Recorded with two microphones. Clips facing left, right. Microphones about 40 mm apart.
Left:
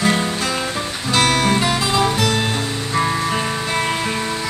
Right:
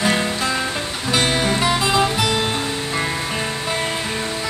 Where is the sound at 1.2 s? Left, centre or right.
Left.